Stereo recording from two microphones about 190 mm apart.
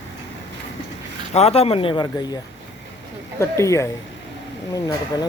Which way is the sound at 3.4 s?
15° left (ahead or behind).